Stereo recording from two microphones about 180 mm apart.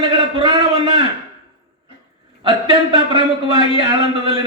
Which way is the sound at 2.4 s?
25° right (ahead or behind).